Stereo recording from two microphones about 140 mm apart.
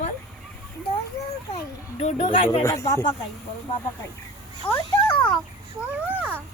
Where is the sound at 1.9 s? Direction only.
50° left (ahead or behind).